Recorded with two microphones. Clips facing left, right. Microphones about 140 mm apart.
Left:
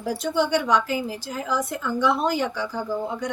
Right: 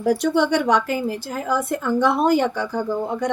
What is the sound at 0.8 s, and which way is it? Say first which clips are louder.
Speech: right 4 dB; 55° right (ahead or behind).